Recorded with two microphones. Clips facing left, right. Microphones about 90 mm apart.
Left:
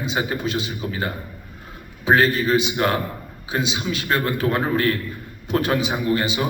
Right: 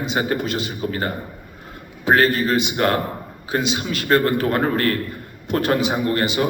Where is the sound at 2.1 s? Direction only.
45° right (ahead or behind).